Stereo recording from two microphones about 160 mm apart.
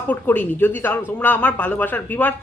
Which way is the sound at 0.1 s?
10° left (ahead or behind).